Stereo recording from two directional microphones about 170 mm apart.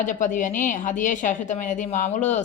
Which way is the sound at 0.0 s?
50° left (ahead or behind).